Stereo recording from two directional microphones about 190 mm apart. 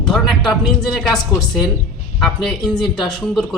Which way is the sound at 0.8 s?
Centre (ahead or behind).